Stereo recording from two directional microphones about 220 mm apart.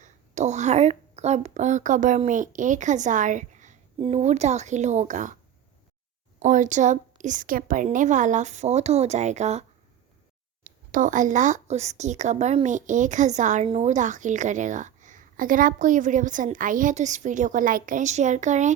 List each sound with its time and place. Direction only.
0.0 s speech: 30° right (ahead or behind)
6.4 s speech: 35° right (ahead or behind)